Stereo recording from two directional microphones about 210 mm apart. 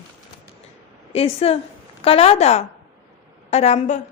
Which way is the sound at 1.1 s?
25° left (ahead or behind).